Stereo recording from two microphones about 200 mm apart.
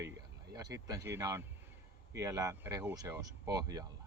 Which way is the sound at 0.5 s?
20° right (ahead or behind).